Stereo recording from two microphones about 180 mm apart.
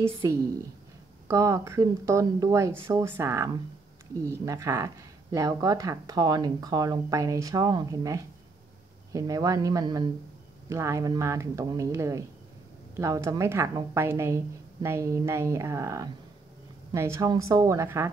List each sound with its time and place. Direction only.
1.2 s a woman's voice: 20° right (ahead or behind)